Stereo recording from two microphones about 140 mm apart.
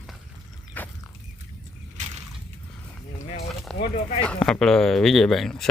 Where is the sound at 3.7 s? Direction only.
5° left (ahead or behind).